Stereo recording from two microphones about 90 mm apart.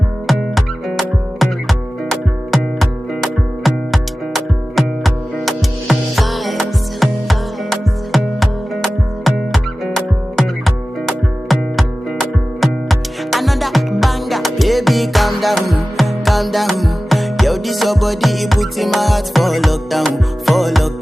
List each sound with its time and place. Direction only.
0.3 s music: centre (ahead or behind)